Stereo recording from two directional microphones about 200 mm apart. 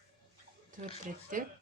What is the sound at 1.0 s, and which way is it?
Speech, 40° right (ahead or behind).